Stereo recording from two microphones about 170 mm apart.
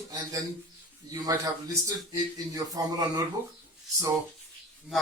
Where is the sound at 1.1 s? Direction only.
20° right (ahead or behind).